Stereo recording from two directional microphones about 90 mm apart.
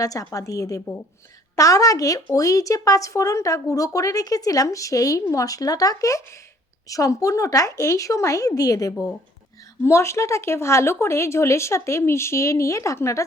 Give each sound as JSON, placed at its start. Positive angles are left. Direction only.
{"t": 0.0, "sound": "speech", "side_deg": 40}